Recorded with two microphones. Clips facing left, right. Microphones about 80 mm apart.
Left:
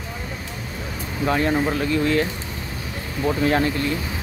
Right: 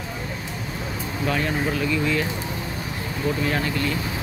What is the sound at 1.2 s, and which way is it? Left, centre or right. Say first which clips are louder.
Speech: left 4 dB; left.